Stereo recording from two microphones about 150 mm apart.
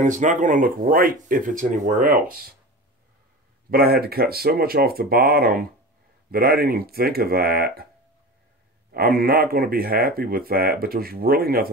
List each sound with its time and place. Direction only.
0.0 s speech: 55° right (ahead or behind); by 2.5 s 75° right (ahead or behind)
3.7 s speech: 90° right
8.9 s speech: 80° right